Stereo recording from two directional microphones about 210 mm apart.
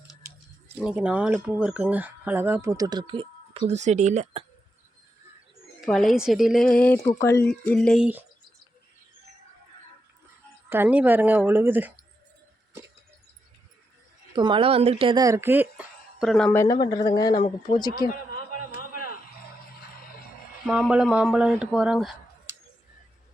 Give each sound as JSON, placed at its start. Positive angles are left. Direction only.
{"t": 0.9, "sound": "speech", "side_deg": -5}
{"t": 5.8, "sound": "speech", "side_deg": 0}
{"t": 10.7, "sound": "speech", "side_deg": -10}
{"t": 14.3, "sound": "speech", "side_deg": -20}
{"t": 18.1, "sound": "a sound", "side_deg": 40}
{"t": 20.7, "sound": "speech", "side_deg": -5}